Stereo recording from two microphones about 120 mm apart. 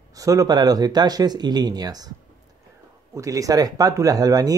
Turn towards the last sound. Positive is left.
turn(degrees=-30)  # may be behind; listen again after turning